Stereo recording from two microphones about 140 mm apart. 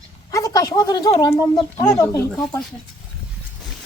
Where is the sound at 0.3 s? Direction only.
25° left (ahead or behind).